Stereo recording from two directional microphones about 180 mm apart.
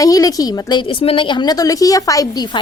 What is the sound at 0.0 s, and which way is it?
A woman's voice, 20° left (ahead or behind).